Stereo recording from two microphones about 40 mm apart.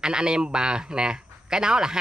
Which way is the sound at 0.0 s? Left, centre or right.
Centre.